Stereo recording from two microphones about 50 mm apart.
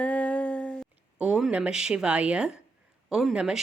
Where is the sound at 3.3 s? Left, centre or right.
Centre.